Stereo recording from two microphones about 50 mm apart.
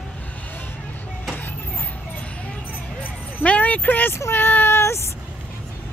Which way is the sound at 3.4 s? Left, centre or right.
Left.